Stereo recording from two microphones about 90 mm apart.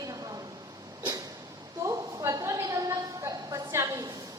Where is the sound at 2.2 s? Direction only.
40° right (ahead or behind).